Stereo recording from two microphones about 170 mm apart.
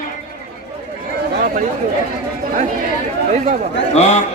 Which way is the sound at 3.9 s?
40° left (ahead or behind).